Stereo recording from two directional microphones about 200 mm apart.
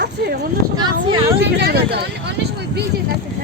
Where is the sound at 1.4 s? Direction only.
55° right (ahead or behind).